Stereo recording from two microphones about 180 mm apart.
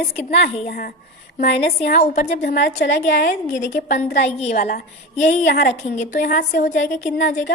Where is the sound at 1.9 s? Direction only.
40° left (ahead or behind).